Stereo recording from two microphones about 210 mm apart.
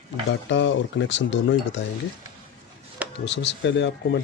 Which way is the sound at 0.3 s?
60° left (ahead or behind).